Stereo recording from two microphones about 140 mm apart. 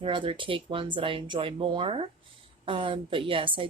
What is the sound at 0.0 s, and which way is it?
A woman's voice, 40° right (ahead or behind).